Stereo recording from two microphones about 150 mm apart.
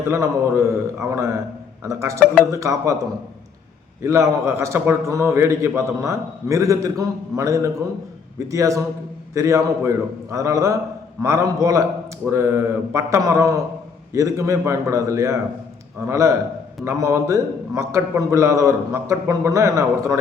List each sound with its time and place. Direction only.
0.1 s a man's voice: 20° right (ahead or behind)
4.0 s a man's voice: 20° right (ahead or behind)